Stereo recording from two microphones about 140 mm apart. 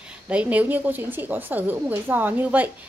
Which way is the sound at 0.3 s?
10° right (ahead or behind).